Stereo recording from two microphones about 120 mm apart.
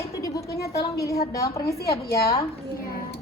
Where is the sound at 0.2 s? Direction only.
25° left (ahead or behind).